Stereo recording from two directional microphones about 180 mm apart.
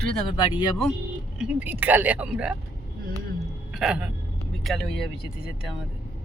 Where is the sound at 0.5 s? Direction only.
25° left (ahead or behind).